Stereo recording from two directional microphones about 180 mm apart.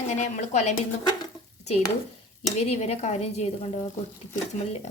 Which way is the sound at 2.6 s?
35° left (ahead or behind).